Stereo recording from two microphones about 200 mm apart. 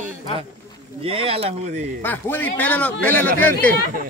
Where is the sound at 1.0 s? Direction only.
30° right (ahead or behind).